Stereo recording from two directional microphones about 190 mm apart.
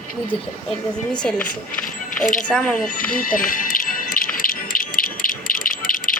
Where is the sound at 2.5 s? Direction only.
5° left (ahead or behind).